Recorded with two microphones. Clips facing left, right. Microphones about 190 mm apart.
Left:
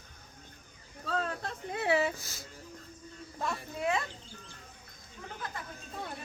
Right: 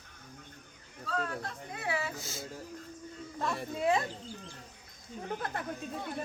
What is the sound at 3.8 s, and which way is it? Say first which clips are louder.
Speech: right 3 dB; 30° right (ahead or behind).